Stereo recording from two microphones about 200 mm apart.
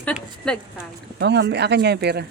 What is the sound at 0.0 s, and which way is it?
Speech, 5° left (ahead or behind).